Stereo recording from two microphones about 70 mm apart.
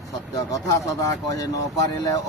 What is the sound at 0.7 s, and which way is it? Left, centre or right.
Speech, left.